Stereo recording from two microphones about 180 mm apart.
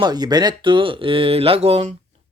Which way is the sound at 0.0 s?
20° right (ahead or behind).